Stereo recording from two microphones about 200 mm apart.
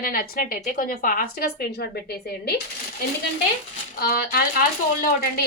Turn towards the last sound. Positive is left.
turn(degrees=45)  # may be behind; listen again after turning